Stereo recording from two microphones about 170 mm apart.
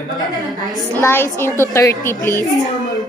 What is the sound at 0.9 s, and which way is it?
A woman's voice, 15° left (ahead or behind).